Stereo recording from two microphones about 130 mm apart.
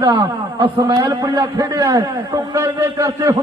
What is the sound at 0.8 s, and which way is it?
A man's voice, 35° right (ahead or behind).